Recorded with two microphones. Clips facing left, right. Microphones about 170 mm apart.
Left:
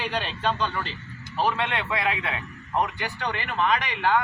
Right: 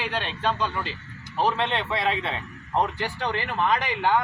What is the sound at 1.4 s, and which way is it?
A man's voice, 20° right (ahead or behind).